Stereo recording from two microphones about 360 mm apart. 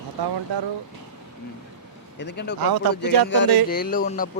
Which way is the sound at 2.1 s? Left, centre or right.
Left.